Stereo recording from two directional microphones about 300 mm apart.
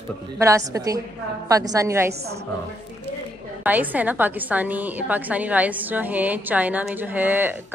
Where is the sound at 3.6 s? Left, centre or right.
Centre.